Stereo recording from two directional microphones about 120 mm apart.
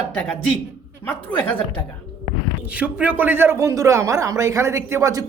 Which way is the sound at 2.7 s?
10° right (ahead or behind).